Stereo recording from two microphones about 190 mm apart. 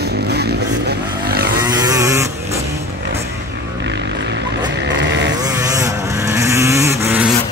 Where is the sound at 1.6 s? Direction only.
20° right (ahead or behind).